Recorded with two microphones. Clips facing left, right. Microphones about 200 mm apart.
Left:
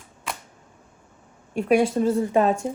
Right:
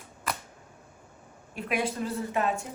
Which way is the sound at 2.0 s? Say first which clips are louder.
Left 9 dB; 30° left (ahead or behind).